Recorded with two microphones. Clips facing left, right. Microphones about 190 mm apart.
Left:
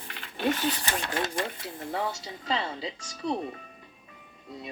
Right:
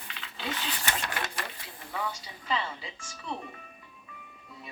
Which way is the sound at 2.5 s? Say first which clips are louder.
Left 2 dB; 30° left (ahead or behind).